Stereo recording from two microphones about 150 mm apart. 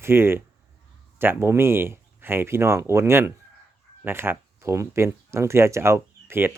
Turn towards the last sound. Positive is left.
turn(degrees=-15)  # may be behind; listen again after turning